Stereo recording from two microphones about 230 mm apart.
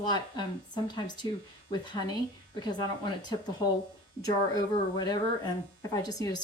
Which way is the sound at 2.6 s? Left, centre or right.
Centre.